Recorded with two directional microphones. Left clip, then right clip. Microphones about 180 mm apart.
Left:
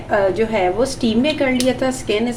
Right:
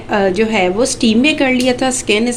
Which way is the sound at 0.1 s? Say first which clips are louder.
Right 2 dB; 55° right (ahead or behind).